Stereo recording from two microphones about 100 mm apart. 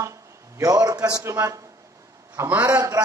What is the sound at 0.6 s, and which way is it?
A man's voice, 35° right (ahead or behind).